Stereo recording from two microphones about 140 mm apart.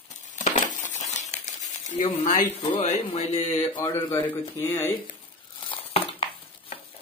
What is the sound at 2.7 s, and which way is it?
Speech, 45° left (ahead or behind).